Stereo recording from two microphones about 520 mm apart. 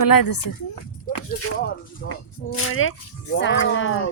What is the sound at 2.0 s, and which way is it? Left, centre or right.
Speech, left.